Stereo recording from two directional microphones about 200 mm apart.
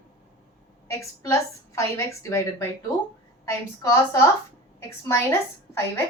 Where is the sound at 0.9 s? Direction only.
15° left (ahead or behind).